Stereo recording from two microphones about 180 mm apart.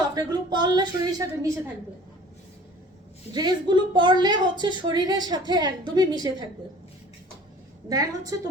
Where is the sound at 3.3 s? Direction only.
25° right (ahead or behind).